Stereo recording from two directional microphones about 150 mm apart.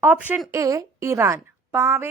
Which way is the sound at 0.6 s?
20° right (ahead or behind).